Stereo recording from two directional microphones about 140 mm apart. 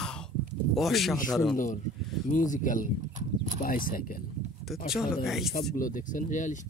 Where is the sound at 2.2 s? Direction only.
65° left (ahead or behind).